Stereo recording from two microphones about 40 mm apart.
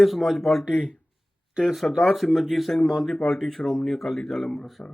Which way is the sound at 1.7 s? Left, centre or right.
Centre.